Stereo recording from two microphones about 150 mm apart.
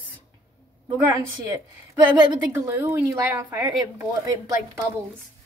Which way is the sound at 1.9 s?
25° right (ahead or behind).